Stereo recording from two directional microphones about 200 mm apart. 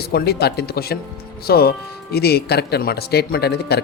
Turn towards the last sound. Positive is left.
turn(degrees=55)  # may be behind; listen again after turning